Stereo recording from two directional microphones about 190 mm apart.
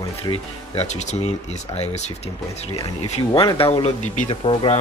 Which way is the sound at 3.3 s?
30° left (ahead or behind).